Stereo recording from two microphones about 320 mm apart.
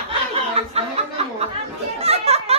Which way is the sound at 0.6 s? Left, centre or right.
Centre.